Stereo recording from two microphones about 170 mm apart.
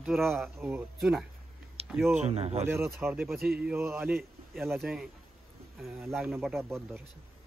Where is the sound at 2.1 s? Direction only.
35° right (ahead or behind).